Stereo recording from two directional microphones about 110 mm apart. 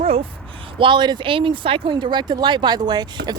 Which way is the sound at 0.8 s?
45° right (ahead or behind).